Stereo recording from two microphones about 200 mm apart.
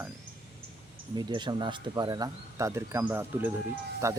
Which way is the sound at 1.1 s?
20° right (ahead or behind).